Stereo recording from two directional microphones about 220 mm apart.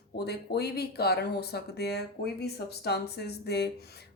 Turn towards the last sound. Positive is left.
turn(degrees=50)  # may be behind; listen again after turning